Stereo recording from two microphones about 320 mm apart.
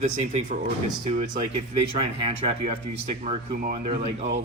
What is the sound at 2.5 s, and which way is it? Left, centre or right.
Speech, centre.